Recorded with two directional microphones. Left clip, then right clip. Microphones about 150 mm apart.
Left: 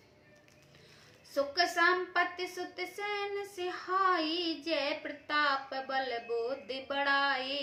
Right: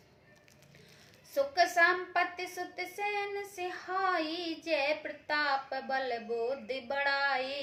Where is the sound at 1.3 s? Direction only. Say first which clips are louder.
Right 2 dB; 20° left (ahead or behind).